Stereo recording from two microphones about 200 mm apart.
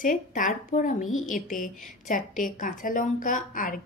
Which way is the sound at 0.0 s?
40° left (ahead or behind).